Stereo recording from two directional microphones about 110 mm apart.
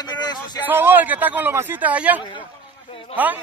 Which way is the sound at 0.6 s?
15° right (ahead or behind).